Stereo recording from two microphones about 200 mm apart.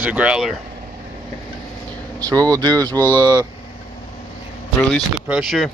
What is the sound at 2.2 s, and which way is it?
Speech, 20° right (ahead or behind).